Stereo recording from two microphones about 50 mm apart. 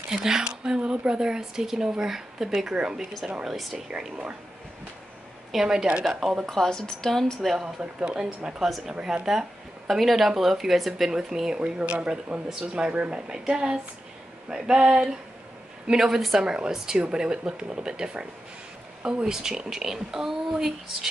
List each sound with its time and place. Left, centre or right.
0.2 s a woman's voice: centre
5.5 s speech: centre
6.4 s speech: centre
7.6 s a woman's voice: centre
8.5 s speech: centre
11.6 s a woman's voice: right
15.9 s speech: centre
19.2 s speech: centre